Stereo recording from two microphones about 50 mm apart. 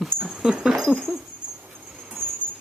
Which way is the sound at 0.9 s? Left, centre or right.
Centre.